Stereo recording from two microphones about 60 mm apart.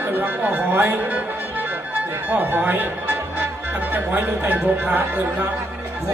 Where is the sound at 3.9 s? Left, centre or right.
Right.